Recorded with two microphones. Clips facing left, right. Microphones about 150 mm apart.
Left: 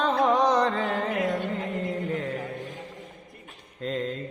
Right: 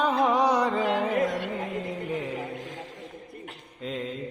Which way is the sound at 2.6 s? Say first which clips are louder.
Left 1 dB; 90° right.